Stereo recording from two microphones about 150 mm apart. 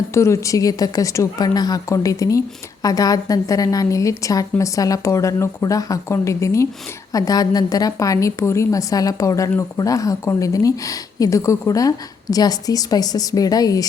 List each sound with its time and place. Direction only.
0.1 s a woman's voice: 20° left (ahead or behind)